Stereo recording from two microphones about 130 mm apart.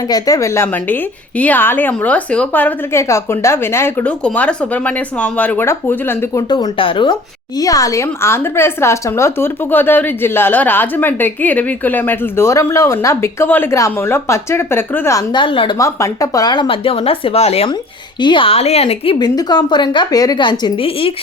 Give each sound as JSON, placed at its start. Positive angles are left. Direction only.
{"t": 0.1, "sound": "a woman's voice", "side_deg": 25}
{"t": 6.5, "sound": "a woman's voice", "side_deg": 40}
{"t": 7.6, "sound": "a woman's voice", "side_deg": 25}
{"t": 15.3, "sound": "a woman's voice", "side_deg": 40}
{"t": 15.8, "sound": "speech", "side_deg": 25}
{"t": 18.2, "sound": "speech", "side_deg": 40}
{"t": 19.2, "sound": "a woman's voice", "side_deg": 35}